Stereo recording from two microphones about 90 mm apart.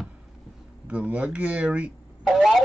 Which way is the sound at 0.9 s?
15° right (ahead or behind).